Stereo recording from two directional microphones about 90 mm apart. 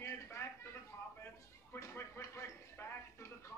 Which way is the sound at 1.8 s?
30° left (ahead or behind).